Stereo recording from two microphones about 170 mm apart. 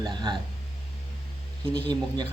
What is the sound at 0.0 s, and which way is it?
Speech, 25° right (ahead or behind).